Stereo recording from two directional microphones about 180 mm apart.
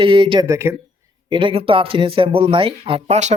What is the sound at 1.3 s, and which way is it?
Speech, 30° right (ahead or behind).